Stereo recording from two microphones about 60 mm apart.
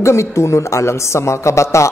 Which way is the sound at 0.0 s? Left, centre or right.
Left.